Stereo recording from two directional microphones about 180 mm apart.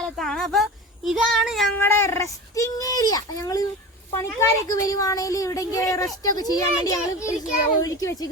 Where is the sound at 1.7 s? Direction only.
10° left (ahead or behind).